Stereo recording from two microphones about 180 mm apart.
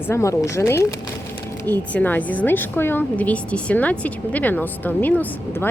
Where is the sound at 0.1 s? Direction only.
15° left (ahead or behind).